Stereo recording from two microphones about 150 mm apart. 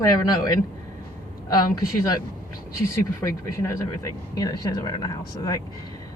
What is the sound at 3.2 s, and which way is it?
Speech, 20° left (ahead or behind).